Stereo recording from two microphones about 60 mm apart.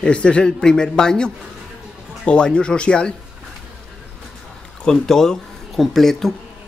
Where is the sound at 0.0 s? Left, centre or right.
Centre.